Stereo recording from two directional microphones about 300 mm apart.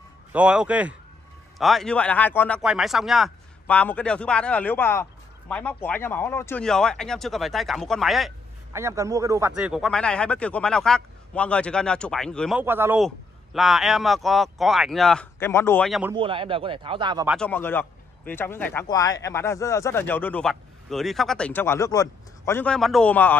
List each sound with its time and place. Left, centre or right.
0.3 s speech: centre
16.1 s speech: centre
17.3 s speech: centre